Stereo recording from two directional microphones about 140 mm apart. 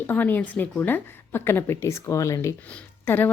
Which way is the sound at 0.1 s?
15° left (ahead or behind).